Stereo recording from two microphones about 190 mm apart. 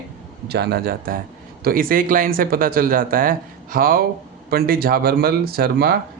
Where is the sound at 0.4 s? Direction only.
60° right (ahead or behind).